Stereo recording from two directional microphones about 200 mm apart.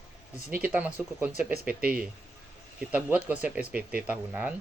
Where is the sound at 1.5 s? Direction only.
50° right (ahead or behind).